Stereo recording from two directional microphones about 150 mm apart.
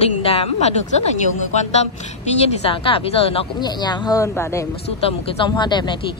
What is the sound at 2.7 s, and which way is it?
Speech, 35° left (ahead or behind).